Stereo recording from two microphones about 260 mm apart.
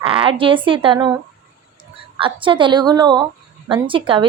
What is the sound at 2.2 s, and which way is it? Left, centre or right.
A woman's voice, centre.